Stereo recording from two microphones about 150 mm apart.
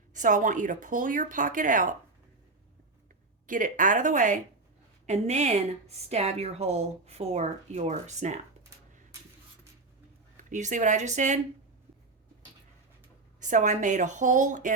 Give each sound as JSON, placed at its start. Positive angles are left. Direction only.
{"t": 0.1, "sound": "speech", "side_deg": -60}
{"t": 3.4, "sound": "a woman's voice", "side_deg": -60}
{"t": 10.5, "sound": "a woman's voice", "side_deg": -55}
{"t": 13.4, "sound": "speech", "side_deg": -55}